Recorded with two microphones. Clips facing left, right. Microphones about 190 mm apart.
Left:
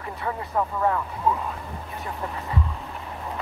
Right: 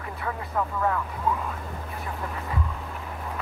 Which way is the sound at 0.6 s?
30° left (ahead or behind).